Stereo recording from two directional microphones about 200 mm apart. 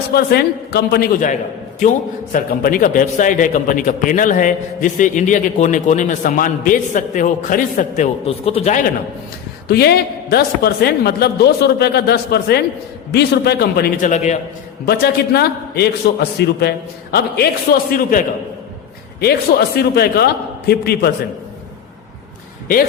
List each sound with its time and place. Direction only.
0.1 s a woman's voice: 50° left (ahead or behind); by 8.9 s 35° left (ahead or behind)
9.6 s a woman's voice: 55° left (ahead or behind); by 14.3 s 35° left (ahead or behind)
14.8 s a woman's voice: 50° left (ahead or behind)
19.2 s a woman's voice: 50° left (ahead or behind)